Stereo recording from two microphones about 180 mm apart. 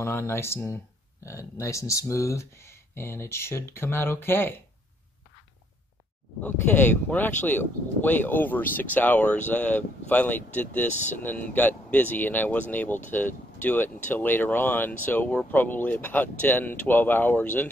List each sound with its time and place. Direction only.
0.0 s speech: 15° left (ahead or behind)
6.4 s speech: 10° left (ahead or behind)
10.9 s speech: 40° left (ahead or behind)
11.2 s speech: 10° left (ahead or behind)